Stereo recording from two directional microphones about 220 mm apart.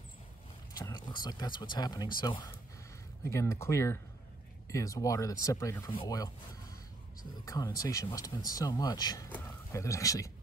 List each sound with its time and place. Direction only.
0.7 s speech: 20° left (ahead or behind)